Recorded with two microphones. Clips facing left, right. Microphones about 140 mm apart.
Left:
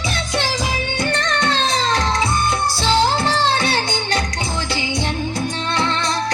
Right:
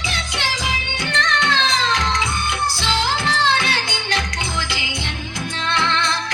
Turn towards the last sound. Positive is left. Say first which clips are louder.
# left 1 dB
turn(degrees=40)  # may be behind; listen again after turning